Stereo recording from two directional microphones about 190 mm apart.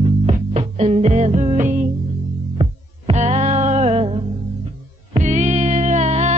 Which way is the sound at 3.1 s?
35° right (ahead or behind).